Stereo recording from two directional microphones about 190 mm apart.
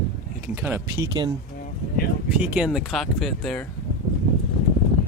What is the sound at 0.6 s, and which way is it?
Speech, 15° right (ahead or behind).